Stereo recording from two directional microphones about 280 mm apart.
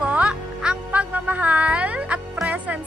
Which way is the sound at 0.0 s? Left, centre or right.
Centre.